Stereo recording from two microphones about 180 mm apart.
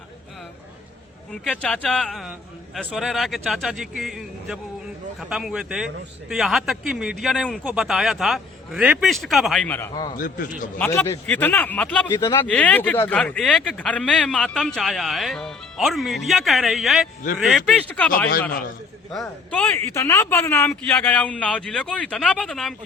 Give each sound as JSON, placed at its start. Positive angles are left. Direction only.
{"t": 1.3, "sound": "speech", "side_deg": 5}
{"t": 9.9, "sound": "a man's voice", "side_deg": 25}
{"t": 10.2, "sound": "a man's voice", "side_deg": 50}
{"t": 10.8, "sound": "a man's voice", "side_deg": 10}
{"t": 12.0, "sound": "a man's voice", "side_deg": 20}
{"t": 19.5, "sound": "a man's voice", "side_deg": 10}